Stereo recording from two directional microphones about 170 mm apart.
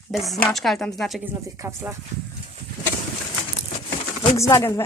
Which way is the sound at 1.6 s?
15° right (ahead or behind).